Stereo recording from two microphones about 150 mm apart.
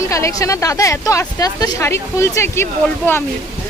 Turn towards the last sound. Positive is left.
turn(degrees=15)  # may be behind; listen again after turning